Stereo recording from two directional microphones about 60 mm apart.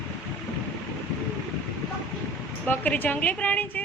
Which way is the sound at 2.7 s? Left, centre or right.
Left.